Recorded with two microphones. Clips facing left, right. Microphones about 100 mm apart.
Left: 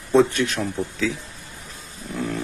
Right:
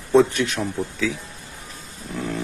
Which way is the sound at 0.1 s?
15° right (ahead or behind).